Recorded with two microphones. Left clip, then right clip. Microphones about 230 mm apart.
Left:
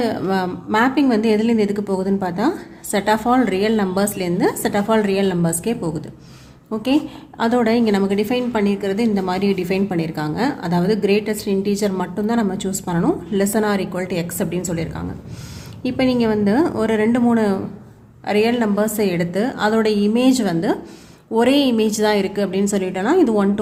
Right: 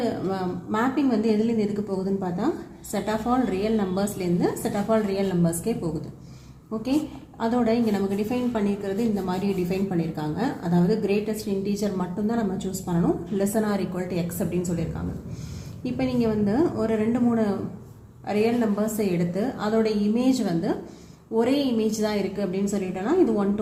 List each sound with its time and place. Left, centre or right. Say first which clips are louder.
0.0 s a woman's voice: left 7 dB; left
7.3 s a woman's voice: left 6 dB; left